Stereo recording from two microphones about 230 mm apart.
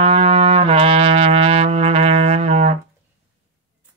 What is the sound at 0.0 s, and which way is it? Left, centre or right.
Music, right.